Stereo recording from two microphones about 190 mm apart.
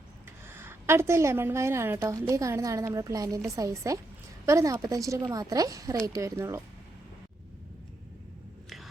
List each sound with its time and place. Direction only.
0.4 s a woman's voice: 10° right (ahead or behind)